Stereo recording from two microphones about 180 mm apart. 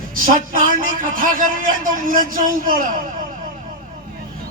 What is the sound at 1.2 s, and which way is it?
A man's voice, 50° right (ahead or behind).